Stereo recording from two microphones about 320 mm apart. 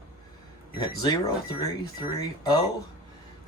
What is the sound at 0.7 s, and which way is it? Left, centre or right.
Speech, centre.